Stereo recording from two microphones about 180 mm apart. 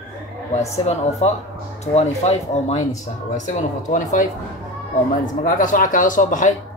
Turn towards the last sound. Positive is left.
turn(degrees=45)  # may be behind; listen again after turning